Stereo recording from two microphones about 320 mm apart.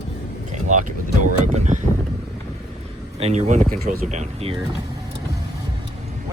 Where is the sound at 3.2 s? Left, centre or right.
Centre.